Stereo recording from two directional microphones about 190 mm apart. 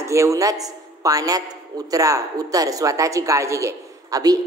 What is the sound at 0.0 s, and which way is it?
A man's voice, 15° right (ahead or behind).